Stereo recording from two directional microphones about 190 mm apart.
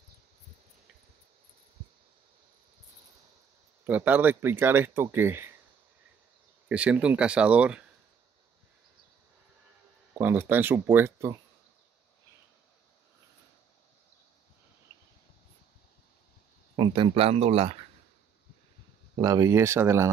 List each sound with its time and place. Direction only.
3.8 s speech: 10° right (ahead or behind)
6.7 s speech: 5° right (ahead or behind)
10.1 s speech: 10° right (ahead or behind)
16.7 s speech: 25° right (ahead or behind)
19.2 s speech: 15° right (ahead or behind)